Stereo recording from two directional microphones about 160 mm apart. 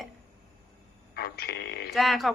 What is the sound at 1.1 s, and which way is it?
Speech, 80° left.